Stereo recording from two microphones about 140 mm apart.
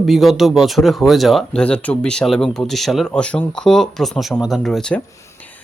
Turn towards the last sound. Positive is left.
turn(degrees=5)  # may be behind; listen again after turning